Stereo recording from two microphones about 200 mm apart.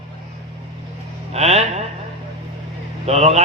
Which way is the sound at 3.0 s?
35° right (ahead or behind).